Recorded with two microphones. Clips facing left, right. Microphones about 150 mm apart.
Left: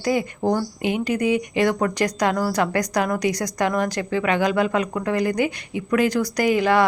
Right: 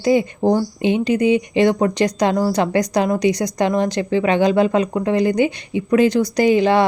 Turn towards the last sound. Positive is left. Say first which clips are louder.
# right 4 dB
turn(degrees=-25)  # may be behind; listen again after turning